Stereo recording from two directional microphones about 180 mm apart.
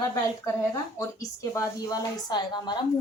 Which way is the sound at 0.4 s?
20° left (ahead or behind).